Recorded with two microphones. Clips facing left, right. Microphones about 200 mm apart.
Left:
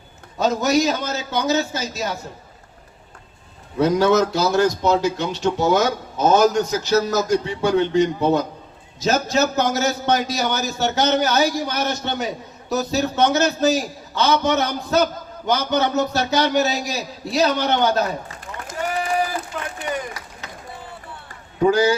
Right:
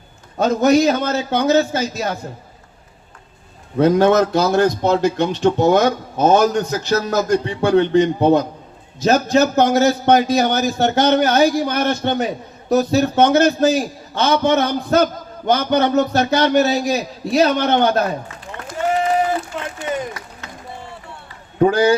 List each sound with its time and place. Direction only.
0.3 s a man's voice: 55° right (ahead or behind)
3.8 s a man's voice: 55° right (ahead or behind)
18.9 s a sound: 25° right (ahead or behind)
21.6 s a man's voice: 55° right (ahead or behind)